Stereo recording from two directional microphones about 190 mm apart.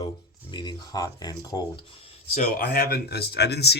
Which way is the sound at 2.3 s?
50° left (ahead or behind).